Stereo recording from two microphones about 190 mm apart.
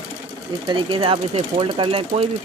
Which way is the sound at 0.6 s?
25° right (ahead or behind).